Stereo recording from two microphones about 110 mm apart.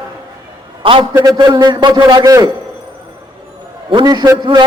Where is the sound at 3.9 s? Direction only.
40° right (ahead or behind).